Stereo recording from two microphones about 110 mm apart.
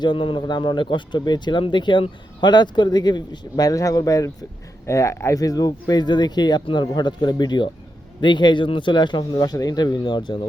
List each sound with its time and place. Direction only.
0.0 s speech: 45° left (ahead or behind)